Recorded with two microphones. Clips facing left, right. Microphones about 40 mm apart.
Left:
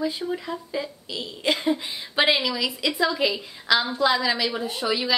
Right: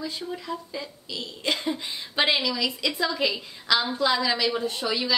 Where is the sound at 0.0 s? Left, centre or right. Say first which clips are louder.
Left 6 dB; centre.